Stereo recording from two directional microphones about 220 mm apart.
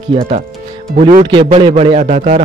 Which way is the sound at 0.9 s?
35° right (ahead or behind).